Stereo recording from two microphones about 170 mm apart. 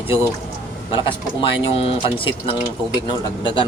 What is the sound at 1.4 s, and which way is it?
A man's voice, 30° left (ahead or behind).